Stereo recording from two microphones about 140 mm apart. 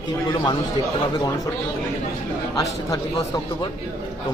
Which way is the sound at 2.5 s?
25° left (ahead or behind).